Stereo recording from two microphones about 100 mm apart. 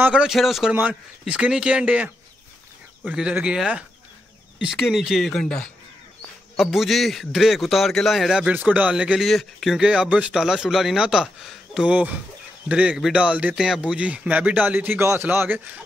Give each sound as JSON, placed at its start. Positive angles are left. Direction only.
{"t": 0.1, "sound": "speech", "side_deg": -5}
{"t": 3.1, "sound": "speech", "side_deg": -10}
{"t": 8.5, "sound": "speech", "side_deg": -15}
{"t": 9.2, "sound": "speech", "side_deg": 0}